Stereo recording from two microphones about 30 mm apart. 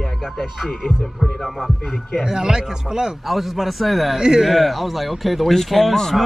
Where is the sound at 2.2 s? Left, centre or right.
Right.